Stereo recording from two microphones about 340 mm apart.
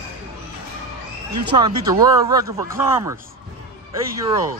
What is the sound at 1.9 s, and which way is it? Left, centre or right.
Speech, centre.